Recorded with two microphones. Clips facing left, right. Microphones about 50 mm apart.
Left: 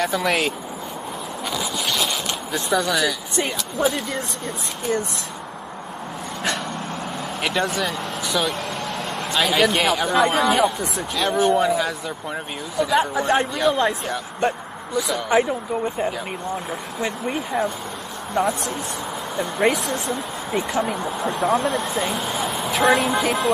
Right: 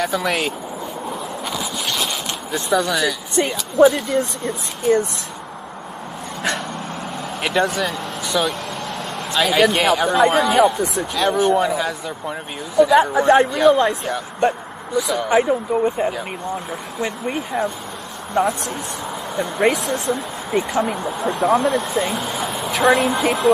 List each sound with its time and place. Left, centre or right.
0.0 s speech: centre
1.6 s zipper: centre
2.5 s speech: centre
7.4 s speech: centre
21.5 s speech: right
21.9 s speech: centre